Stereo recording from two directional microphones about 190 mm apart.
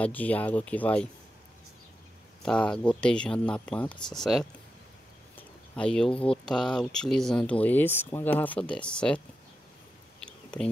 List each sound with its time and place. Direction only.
0.0 s speech: 10° left (ahead or behind)
2.4 s speech: 5° left (ahead or behind)
5.8 s speech: 5° left (ahead or behind)
10.2 s a sound: 5° left (ahead or behind)